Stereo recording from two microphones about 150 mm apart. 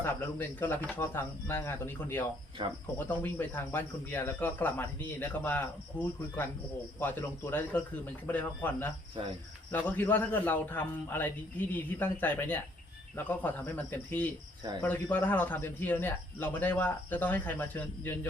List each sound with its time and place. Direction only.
0.0 s speech: 15° left (ahead or behind)
2.6 s speech: 30° right (ahead or behind)
3.0 s speech: 15° left (ahead or behind)